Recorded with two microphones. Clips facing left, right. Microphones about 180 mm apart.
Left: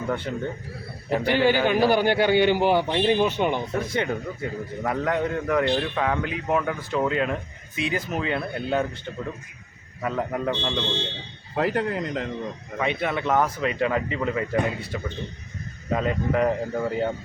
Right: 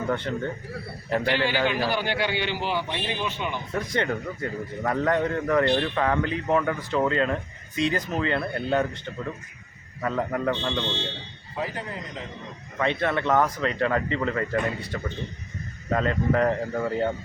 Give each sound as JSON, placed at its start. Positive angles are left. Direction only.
{"t": 0.3, "sound": "speech", "side_deg": 10}
{"t": 1.5, "sound": "a man's voice", "side_deg": 50}
{"t": 3.8, "sound": "a man's voice", "side_deg": 5}
{"t": 10.0, "sound": "speech", "side_deg": 10}
{"t": 11.5, "sound": "a man's voice", "side_deg": 65}
{"t": 12.8, "sound": "speech", "side_deg": 10}